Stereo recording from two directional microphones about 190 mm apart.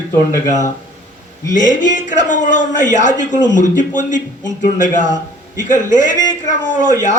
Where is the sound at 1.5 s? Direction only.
40° left (ahead or behind).